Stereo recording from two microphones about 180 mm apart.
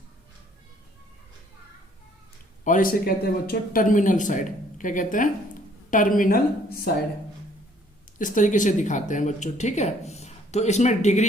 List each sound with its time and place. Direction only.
2.6 s speech: 50° left (ahead or behind)
8.2 s speech: 45° left (ahead or behind)